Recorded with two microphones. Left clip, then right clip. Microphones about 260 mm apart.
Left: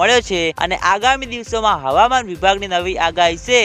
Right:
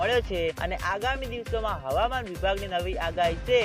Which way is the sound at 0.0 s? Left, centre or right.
Left.